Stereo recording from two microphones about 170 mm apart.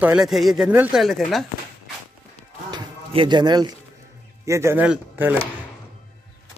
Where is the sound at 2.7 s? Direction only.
30° right (ahead or behind).